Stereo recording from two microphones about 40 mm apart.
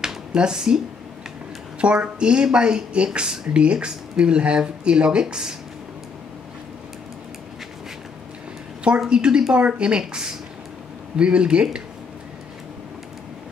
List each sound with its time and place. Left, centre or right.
0.0 s a sound: centre
1.8 s speech: right
9.0 s speech: right